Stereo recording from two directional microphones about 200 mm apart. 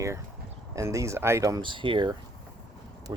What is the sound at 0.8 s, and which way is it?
Speech, 15° right (ahead or behind).